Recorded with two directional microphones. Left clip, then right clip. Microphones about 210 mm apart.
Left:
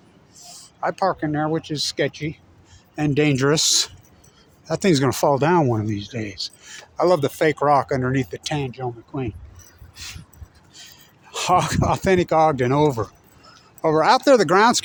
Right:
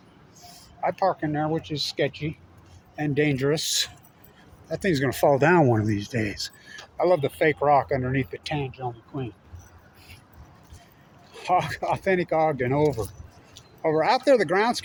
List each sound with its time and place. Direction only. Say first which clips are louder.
0.8 s speech: left 2 dB; 40° left (ahead or behind)
5.3 s speech: right 1 dB; 15° left (ahead or behind)
6.7 s speech: left 3 dB; 40° left (ahead or behind)
11.3 s speech: left 5 dB; 50° left (ahead or behind)